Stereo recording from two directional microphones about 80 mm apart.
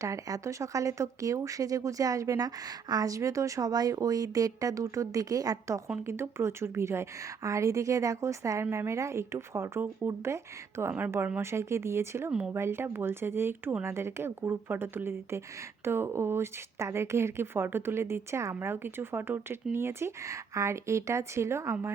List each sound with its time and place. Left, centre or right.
0.0 s speech: right
6.1 s speech: right
10.9 s a woman's voice: right